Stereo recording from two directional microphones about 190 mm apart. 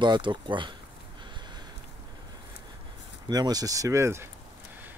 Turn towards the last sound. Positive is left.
turn(degrees=-15)  # may be behind; listen again after turning